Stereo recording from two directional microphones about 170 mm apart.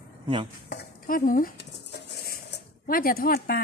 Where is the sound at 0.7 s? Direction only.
65° left (ahead or behind).